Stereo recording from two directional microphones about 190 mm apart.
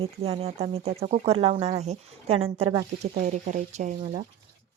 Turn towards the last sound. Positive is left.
turn(degrees=-40)  # may be behind; listen again after turning